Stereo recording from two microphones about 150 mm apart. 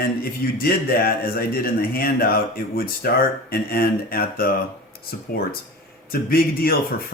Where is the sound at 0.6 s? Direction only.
80° left.